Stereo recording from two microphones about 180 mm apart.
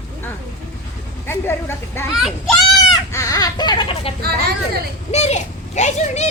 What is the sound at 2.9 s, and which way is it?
Chicken, 20° left (ahead or behind).